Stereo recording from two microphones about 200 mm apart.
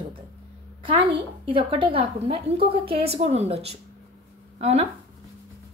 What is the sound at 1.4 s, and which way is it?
A woman's voice, 25° right (ahead or behind).